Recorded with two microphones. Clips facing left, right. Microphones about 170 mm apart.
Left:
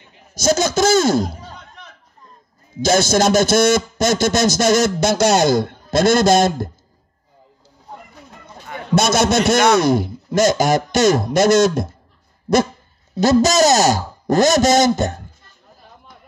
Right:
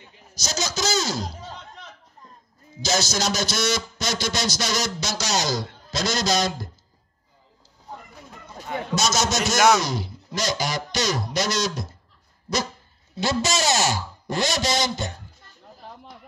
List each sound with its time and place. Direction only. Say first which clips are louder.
0.3 s a man's voice: left 13 dB; 50° left (ahead or behind)
2.8 s a man's voice: left 10 dB; 55° left (ahead or behind)
8.9 s a man's voice: left 9 dB; 55° left (ahead or behind)
13.1 s a man's voice: left 10 dB; 40° left (ahead or behind)